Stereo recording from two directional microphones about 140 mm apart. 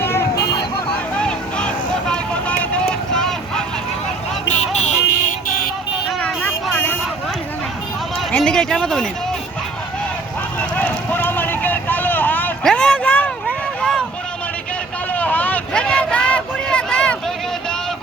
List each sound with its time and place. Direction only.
0.0 s vehicle: 20° left (ahead or behind)
1.1 s vehicle: 5° left (ahead or behind)
4.4 s vehicle: 55° left (ahead or behind)
6.1 s vehicle: 10° left (ahead or behind)
8.3 s a sound: 5° left (ahead or behind)
10.6 s vehicle: 10° left (ahead or behind)
15.1 s vehicle: 10° left (ahead or behind)